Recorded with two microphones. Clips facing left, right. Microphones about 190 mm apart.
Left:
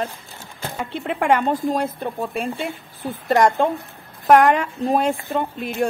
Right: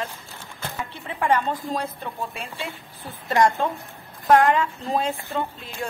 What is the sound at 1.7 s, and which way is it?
Speech, 45° left (ahead or behind).